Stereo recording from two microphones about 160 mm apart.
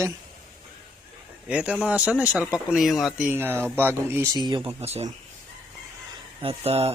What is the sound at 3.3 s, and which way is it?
Speech, 15° right (ahead or behind).